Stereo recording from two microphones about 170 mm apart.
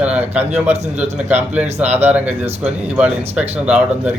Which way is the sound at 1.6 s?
40° right (ahead or behind).